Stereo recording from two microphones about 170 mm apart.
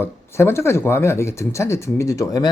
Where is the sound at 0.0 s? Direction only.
15° left (ahead or behind).